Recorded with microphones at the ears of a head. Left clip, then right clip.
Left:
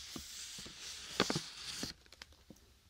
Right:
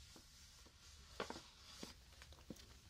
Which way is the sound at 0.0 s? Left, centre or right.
Left.